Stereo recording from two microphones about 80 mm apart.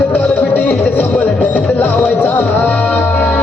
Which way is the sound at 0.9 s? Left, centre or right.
Left.